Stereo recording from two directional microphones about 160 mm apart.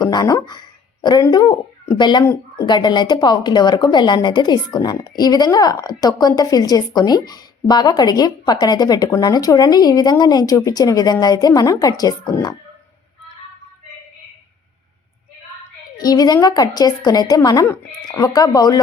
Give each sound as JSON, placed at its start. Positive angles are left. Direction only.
{"t": 0.0, "sound": "speech", "side_deg": 25}
{"t": 2.2, "sound": "speech", "side_deg": 15}
{"t": 2.6, "sound": "speech", "side_deg": 30}
{"t": 16.0, "sound": "speech", "side_deg": 25}